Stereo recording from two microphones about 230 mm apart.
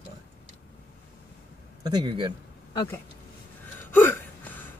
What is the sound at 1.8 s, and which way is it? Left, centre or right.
Speech, centre.